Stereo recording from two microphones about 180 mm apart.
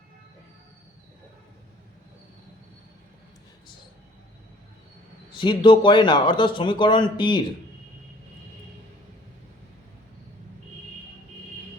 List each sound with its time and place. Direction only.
5.4 s a man's voice: 25° left (ahead or behind)